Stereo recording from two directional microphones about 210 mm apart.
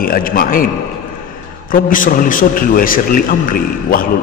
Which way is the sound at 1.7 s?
40° left (ahead or behind).